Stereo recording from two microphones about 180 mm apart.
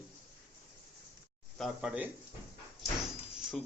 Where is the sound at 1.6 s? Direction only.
Centre (ahead or behind).